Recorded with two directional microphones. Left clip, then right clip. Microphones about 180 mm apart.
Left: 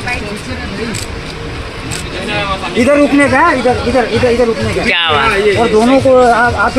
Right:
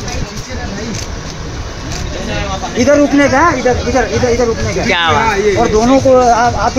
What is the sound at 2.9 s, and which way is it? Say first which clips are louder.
Speech: even; 40° left (ahead or behind).